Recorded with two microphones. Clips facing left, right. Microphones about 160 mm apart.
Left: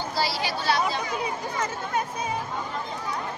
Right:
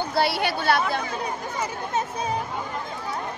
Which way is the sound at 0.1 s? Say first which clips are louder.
Right 4 dB; 60° right (ahead or behind).